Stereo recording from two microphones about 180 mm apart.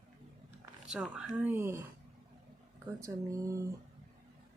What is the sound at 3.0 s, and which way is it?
Speech, 15° right (ahead or behind).